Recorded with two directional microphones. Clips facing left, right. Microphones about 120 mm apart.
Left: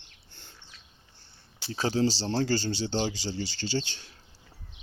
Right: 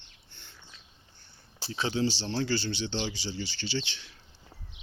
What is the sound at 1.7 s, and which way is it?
Speech, 40° left (ahead or behind).